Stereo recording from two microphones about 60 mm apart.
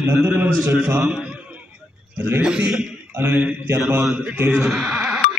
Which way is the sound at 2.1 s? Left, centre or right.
Right.